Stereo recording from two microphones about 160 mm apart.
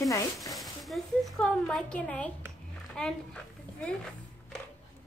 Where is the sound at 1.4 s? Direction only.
5° left (ahead or behind).